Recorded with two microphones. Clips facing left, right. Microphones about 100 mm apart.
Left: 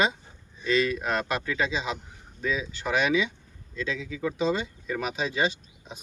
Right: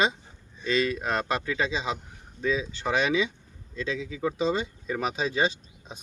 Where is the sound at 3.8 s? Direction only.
25° right (ahead or behind).